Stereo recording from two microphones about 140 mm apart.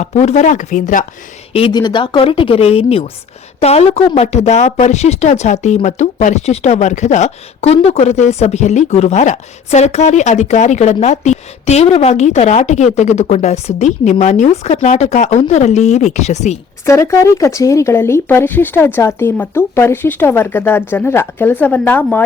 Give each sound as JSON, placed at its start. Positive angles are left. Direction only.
{"t": 0.0, "sound": "speech", "side_deg": 55}
{"t": 1.7, "sound": "speech", "side_deg": 35}
{"t": 16.8, "sound": "speech", "side_deg": 20}